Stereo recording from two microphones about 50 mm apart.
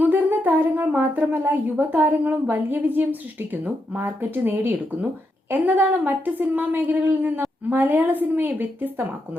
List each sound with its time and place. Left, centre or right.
0.0 s a woman's voice: right